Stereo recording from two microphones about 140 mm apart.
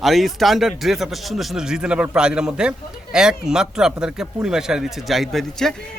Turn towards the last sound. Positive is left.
turn(degrees=0)  # may be behind; listen again after turning